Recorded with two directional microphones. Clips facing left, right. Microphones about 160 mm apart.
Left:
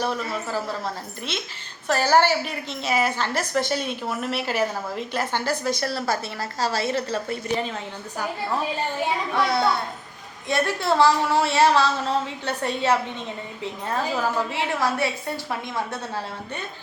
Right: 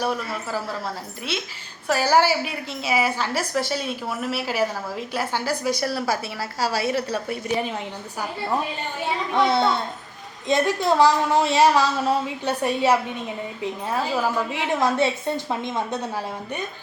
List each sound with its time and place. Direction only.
0.0 s a woman's voice: 10° right (ahead or behind)
9.3 s a child's voice: 25° right (ahead or behind)